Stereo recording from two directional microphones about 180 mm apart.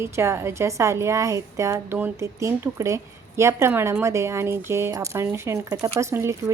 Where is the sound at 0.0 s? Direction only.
15° right (ahead or behind).